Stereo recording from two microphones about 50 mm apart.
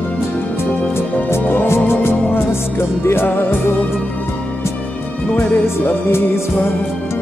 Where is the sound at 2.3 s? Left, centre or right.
Left.